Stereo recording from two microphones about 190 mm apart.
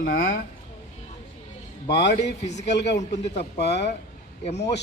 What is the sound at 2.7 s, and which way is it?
Speech, 65° left (ahead or behind).